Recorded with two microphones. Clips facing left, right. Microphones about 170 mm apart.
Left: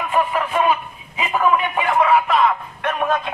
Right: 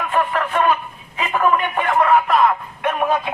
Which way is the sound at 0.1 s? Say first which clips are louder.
Left 1 dB; 10° left (ahead or behind).